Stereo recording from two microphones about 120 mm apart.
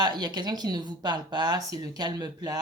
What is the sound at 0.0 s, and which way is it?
Speech, 40° right (ahead or behind).